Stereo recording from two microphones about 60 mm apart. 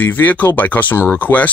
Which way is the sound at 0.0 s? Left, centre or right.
Left.